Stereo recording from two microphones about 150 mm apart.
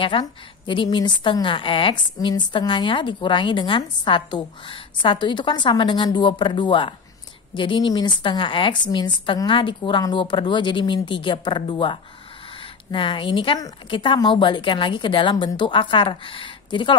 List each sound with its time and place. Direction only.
0.0 s a woman's voice: 35° left (ahead or behind)